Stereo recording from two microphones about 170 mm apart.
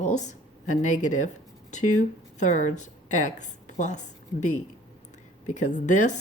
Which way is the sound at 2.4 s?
45° left (ahead or behind).